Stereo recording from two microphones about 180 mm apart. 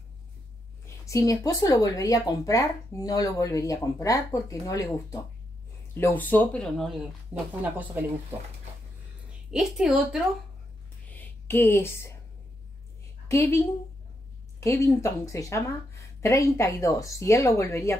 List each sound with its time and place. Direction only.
0.8 s a woman's voice: 15° left (ahead or behind)
7.3 s speech: 10° right (ahead or behind)
9.5 s a woman's voice: 5° right (ahead or behind)
11.1 s a sound: 10° left (ahead or behind)
13.3 s a woman's voice: 15° left (ahead or behind)